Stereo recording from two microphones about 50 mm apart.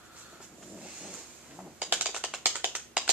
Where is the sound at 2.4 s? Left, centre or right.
Right.